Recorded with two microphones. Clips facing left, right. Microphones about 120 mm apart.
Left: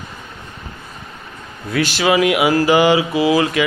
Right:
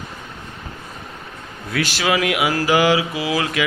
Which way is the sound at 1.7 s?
Centre (ahead or behind).